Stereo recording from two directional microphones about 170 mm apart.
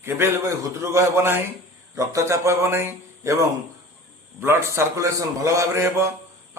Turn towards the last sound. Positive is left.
turn(degrees=-15)  # may be behind; listen again after turning